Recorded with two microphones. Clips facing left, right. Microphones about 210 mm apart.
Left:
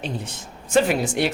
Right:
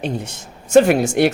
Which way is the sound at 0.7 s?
50° right (ahead or behind).